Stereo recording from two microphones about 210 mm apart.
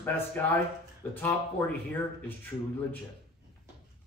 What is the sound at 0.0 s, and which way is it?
Speech, 10° left (ahead or behind).